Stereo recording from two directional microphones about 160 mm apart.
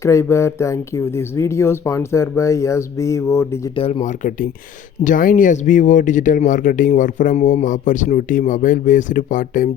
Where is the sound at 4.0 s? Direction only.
50° left (ahead or behind).